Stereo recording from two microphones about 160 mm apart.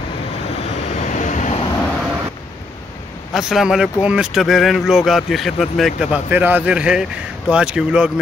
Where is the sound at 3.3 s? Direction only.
Centre (ahead or behind).